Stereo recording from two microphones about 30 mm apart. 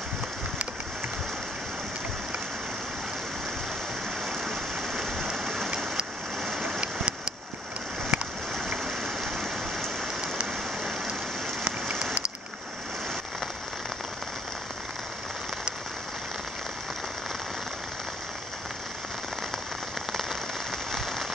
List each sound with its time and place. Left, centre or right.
5.4 s rain: centre
6.4 s a sound: centre
8.1 s a sound: right
8.5 s rain: centre
10.2 s rain: right
11.9 s rain on surface: right